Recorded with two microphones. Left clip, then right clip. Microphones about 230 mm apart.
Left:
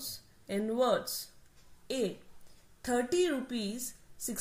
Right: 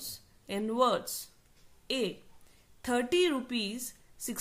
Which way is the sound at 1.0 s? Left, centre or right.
Right.